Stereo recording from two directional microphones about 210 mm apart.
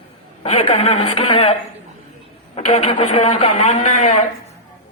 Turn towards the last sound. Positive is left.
turn(degrees=35)  # may be behind; listen again after turning